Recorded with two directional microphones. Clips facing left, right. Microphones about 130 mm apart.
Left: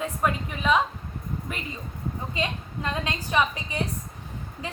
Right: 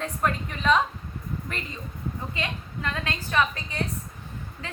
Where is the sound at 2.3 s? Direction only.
20° left (ahead or behind).